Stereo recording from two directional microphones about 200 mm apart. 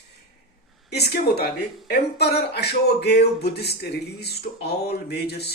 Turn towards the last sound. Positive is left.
turn(degrees=55)  # may be behind; listen again after turning